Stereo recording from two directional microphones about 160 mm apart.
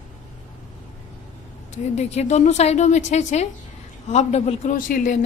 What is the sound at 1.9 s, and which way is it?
A woman's voice, 45° left (ahead or behind).